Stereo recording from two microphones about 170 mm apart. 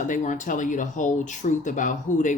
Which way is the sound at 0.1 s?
45° left (ahead or behind).